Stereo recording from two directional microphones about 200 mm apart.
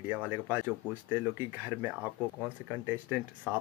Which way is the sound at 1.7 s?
10° right (ahead or behind).